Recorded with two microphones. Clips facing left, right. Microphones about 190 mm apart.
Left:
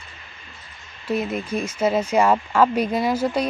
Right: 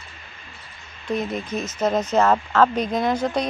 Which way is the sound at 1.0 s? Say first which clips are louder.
Left 1 dB; 5° left (ahead or behind).